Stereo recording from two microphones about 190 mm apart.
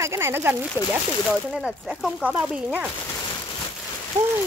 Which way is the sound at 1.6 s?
Centre (ahead or behind).